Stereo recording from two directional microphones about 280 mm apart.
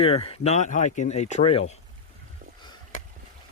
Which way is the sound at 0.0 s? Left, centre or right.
Left.